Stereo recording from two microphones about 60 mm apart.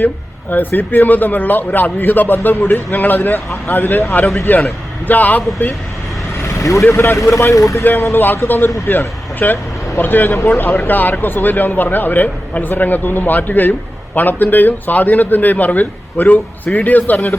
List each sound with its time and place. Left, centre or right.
0.5 s speech: left
6.4 s vehicle: left
7.2 s speech: left
8.1 s speech: left